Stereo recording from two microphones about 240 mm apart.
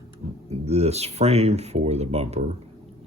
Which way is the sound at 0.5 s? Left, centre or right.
Right.